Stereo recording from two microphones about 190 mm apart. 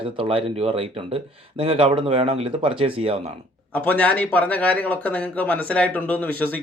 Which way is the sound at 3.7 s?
10° left (ahead or behind).